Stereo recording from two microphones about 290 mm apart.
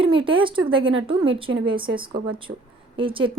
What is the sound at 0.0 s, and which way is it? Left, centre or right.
A woman's voice, centre.